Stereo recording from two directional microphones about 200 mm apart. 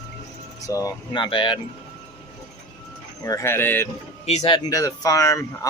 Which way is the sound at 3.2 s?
15° left (ahead or behind).